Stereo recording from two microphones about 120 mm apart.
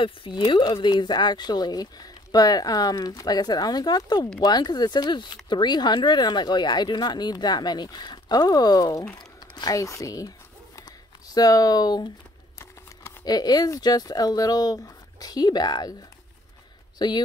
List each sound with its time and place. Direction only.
0.0 s speech: 45° left (ahead or behind)
9.0 s speech: 5° left (ahead or behind)
9.4 s speech: 30° left (ahead or behind)
10.8 s a sound: 35° left (ahead or behind)
13.2 s speech: 35° left (ahead or behind)
17.0 s speech: 35° left (ahead or behind)